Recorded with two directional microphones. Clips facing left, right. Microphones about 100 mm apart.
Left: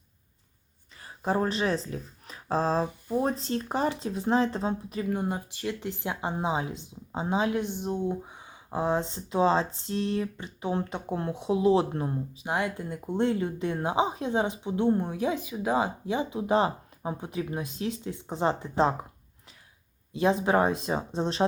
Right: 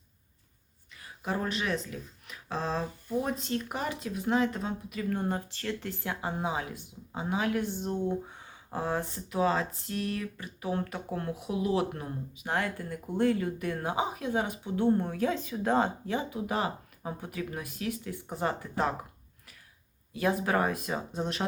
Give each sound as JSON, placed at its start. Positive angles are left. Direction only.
{"t": 0.9, "sound": "speech", "side_deg": 35}
{"t": 5.0, "sound": "speech", "side_deg": 15}
{"t": 12.5, "sound": "speech", "side_deg": 15}
{"t": 20.1, "sound": "speech", "side_deg": 25}